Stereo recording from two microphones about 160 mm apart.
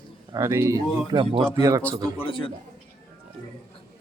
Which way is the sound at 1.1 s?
30° right (ahead or behind).